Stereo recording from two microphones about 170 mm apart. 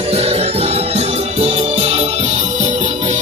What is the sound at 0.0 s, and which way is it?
Music, 35° right (ahead or behind).